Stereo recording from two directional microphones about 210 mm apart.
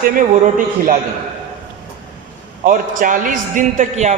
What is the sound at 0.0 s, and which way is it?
Speech, 40° right (ahead or behind).